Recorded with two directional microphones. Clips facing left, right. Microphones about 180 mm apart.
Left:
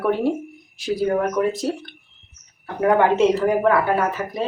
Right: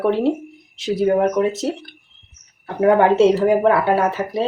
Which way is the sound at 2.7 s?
30° right (ahead or behind).